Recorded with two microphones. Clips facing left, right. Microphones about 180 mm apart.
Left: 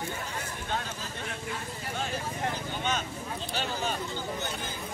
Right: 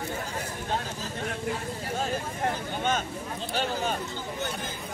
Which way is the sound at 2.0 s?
45° right (ahead or behind).